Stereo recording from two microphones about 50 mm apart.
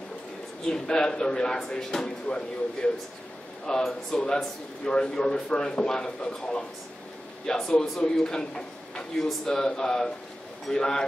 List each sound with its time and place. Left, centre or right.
0.7 s speech: centre